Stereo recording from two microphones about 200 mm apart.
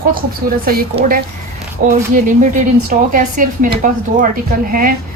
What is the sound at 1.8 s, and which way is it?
A woman's voice, 40° right (ahead or behind).